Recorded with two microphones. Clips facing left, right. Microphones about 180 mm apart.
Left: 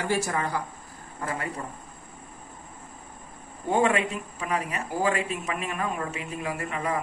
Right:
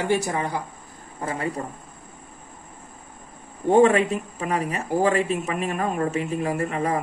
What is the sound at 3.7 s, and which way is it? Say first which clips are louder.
Speech: right 7 dB; 40° right (ahead or behind).